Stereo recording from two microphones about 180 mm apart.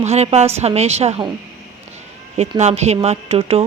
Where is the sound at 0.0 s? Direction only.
35° right (ahead or behind).